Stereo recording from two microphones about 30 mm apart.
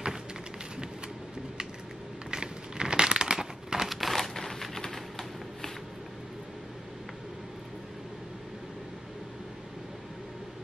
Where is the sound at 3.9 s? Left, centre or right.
Centre.